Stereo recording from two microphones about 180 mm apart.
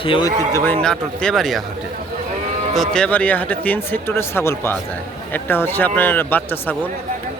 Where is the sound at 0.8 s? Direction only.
5° left (ahead or behind).